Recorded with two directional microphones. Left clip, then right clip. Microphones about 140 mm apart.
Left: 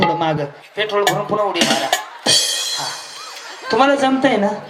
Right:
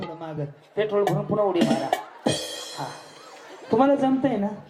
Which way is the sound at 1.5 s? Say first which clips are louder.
Left 7 dB; 15° left (ahead or behind).